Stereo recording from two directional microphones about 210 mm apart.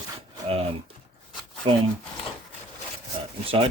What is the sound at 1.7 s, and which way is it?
Speech, 25° right (ahead or behind).